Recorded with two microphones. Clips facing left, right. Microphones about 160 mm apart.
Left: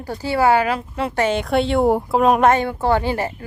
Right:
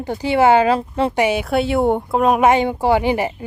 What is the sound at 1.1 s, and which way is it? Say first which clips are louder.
A woman's voice: left 1 dB; 10° right (ahead or behind).